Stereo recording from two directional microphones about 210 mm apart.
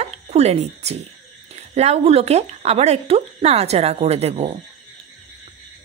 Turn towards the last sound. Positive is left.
turn(degrees=-30)  # may be behind; listen again after turning